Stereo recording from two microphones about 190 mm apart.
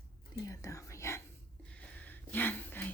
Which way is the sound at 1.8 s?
10° left (ahead or behind).